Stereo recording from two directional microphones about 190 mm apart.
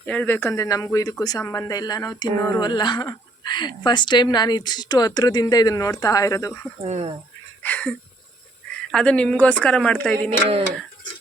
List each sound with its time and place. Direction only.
0.0 s speech: 10° left (ahead or behind)
6.8 s speech: 35° right (ahead or behind)
7.6 s a woman's voice: 5° left (ahead or behind)